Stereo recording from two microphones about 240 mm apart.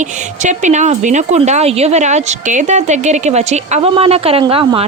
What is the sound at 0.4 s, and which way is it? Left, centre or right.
Speech, right.